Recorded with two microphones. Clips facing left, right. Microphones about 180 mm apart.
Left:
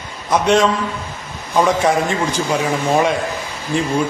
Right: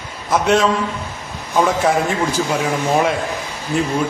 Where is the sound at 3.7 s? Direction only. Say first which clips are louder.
Even; 5° right (ahead or behind).